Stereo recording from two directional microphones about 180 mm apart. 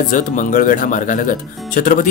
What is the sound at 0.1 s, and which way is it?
Speech, 45° left (ahead or behind).